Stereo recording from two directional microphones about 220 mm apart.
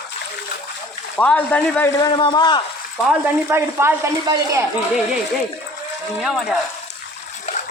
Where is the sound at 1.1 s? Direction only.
5° left (ahead or behind).